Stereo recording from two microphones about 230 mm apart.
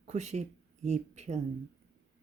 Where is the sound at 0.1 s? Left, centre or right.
Right.